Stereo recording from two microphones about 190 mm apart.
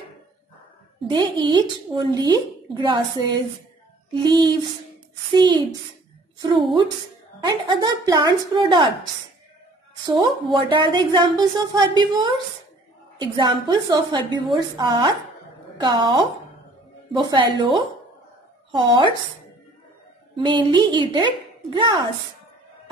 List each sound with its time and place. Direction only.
1.0 s a woman's voice: 25° right (ahead or behind)
4.1 s a woman's voice: 20° right (ahead or behind)
7.4 s a woman's voice: 20° right (ahead or behind)
10.0 s a woman's voice: 20° right (ahead or behind)
20.3 s a woman's voice: 25° right (ahead or behind)